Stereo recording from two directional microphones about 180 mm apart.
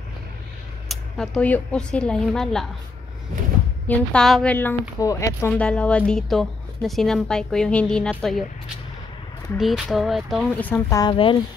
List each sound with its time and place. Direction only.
0.8 s a woman's voice: 5° left (ahead or behind)
3.8 s a woman's voice: 5° left (ahead or behind)
9.6 s a woman's voice: centre (ahead or behind)
10.6 s speech: 15° left (ahead or behind)